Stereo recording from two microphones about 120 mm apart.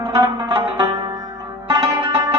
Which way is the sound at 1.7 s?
40° right (ahead or behind).